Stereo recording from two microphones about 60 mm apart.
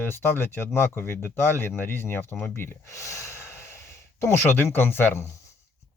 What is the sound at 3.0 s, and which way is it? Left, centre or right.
Breathing, left.